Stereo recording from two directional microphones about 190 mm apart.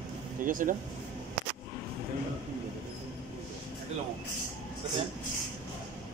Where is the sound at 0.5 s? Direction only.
45° right (ahead or behind).